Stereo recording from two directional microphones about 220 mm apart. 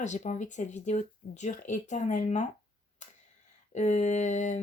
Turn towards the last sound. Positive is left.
turn(degrees=35)  # may be behind; listen again after turning